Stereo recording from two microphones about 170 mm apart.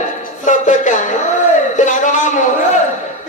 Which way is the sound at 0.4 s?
45° left (ahead or behind).